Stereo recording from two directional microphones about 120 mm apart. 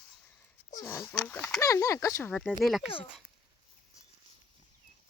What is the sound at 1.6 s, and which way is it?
Speech, 30° left (ahead or behind).